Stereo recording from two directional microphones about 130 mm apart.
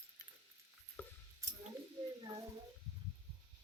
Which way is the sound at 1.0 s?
10° left (ahead or behind).